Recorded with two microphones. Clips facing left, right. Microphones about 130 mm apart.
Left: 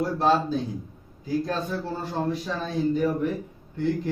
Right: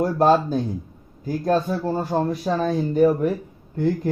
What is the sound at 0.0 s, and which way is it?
Speech, 50° right (ahead or behind).